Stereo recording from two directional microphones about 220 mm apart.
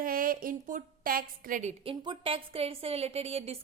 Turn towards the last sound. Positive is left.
turn(degrees=-25)  # may be behind; listen again after turning